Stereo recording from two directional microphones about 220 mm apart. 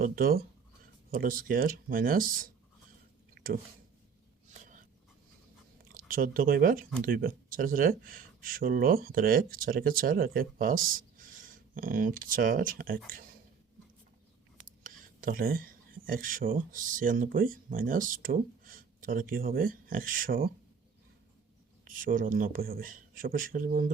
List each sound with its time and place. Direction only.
0.0 s speech: 40° right (ahead or behind)
3.4 s a sound: 50° right (ahead or behind)
4.5 s dog: 35° right (ahead or behind)
5.9 s speech: 40° right (ahead or behind)
14.8 s speech: 40° right (ahead or behind)
21.8 s speech: 35° right (ahead or behind)